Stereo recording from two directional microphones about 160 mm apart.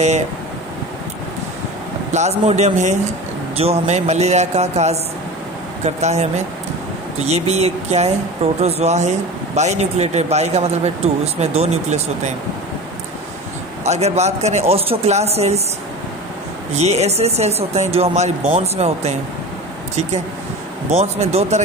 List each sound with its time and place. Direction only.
2.1 s speech: 45° right (ahead or behind)
13.8 s speech: 45° right (ahead or behind)
16.7 s speech: 45° right (ahead or behind)
20.9 s speech: 40° right (ahead or behind)